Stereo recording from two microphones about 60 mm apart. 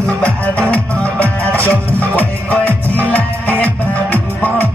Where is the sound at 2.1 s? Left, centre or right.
Left.